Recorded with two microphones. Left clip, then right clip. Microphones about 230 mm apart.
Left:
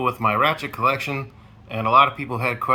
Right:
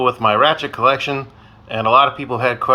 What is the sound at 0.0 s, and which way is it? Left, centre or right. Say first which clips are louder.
Speech: right 6 dB; left.